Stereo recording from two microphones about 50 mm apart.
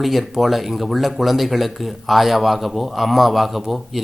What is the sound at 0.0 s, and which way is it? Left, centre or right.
Speech, centre.